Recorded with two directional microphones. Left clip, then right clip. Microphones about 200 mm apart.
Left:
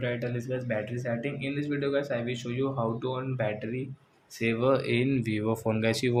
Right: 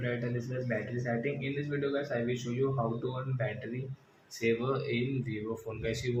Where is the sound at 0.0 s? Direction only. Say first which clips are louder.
Left 3 dB; 40° left (ahead or behind).